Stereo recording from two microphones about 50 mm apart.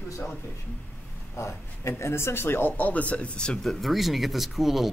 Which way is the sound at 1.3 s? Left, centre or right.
Left.